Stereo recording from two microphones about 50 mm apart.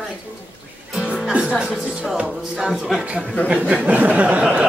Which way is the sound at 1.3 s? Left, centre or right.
Centre.